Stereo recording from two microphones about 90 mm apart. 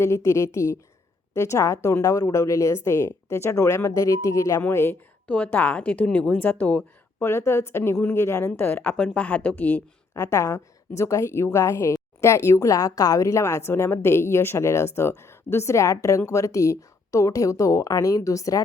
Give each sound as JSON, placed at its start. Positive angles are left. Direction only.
{"t": 0.0, "sound": "a woman's voice", "side_deg": 35}
{"t": 4.6, "sound": "a woman's voice", "side_deg": 25}
{"t": 7.3, "sound": "a woman's voice", "side_deg": 30}
{"t": 10.2, "sound": "a woman's voice", "side_deg": 30}